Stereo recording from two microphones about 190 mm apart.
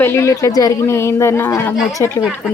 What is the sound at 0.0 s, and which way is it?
Speech, 15° left (ahead or behind).